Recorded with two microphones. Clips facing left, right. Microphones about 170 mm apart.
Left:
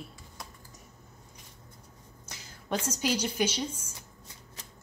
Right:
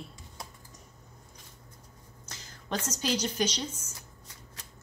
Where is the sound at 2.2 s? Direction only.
10° left (ahead or behind).